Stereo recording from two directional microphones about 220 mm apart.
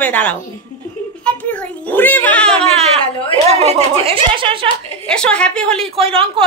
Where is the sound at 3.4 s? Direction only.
30° right (ahead or behind).